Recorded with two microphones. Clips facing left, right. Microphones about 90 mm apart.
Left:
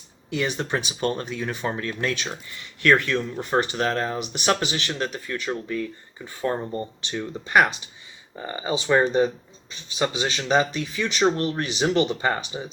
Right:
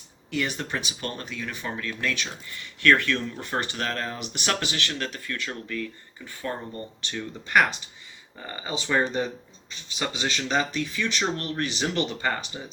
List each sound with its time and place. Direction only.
0.3 s speech: 20° left (ahead or behind)
2.8 s speech: 20° left (ahead or behind)